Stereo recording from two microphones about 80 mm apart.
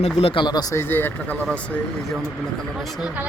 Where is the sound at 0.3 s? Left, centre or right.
Left.